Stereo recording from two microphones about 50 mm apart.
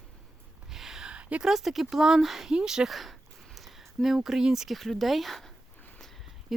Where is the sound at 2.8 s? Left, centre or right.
Centre.